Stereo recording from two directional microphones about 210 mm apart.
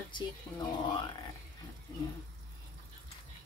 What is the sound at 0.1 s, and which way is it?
Speech, 20° left (ahead or behind).